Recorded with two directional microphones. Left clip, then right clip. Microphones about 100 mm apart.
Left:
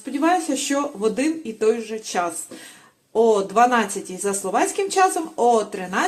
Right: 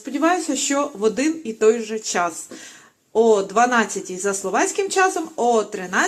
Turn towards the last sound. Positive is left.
turn(degrees=20)  # may be behind; listen again after turning